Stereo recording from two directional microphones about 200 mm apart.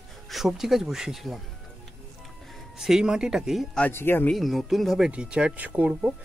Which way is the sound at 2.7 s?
5° right (ahead or behind).